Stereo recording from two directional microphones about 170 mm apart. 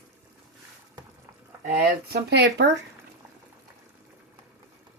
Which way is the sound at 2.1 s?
75° right (ahead or behind).